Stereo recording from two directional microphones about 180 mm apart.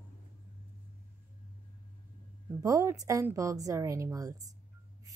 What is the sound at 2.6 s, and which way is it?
A woman's voice, 20° right (ahead or behind).